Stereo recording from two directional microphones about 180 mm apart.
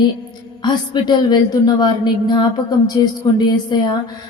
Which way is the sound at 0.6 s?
25° left (ahead or behind).